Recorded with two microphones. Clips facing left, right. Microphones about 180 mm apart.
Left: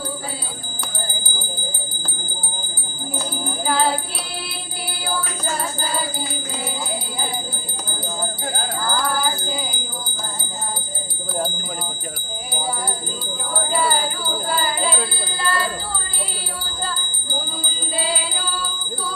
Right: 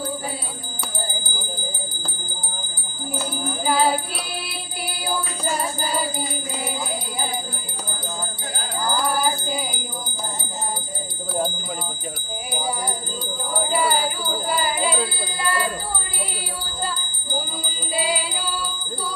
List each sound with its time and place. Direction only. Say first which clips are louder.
3.7 s music: right 1 dB; 10° right (ahead or behind)
8.8 s music: right 2 dB; 15° right (ahead or behind)
13.5 s jingle bell: even; 10° right (ahead or behind)
16.8 s jingle bell: right 1 dB; 10° right (ahead or behind)
17.9 s music: right 1 dB; 10° right (ahead or behind)